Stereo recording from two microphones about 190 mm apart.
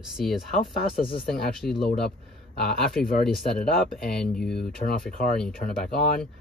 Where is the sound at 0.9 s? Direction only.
50° left (ahead or behind).